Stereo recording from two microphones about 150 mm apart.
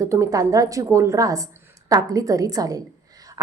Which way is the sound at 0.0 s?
20° right (ahead or behind).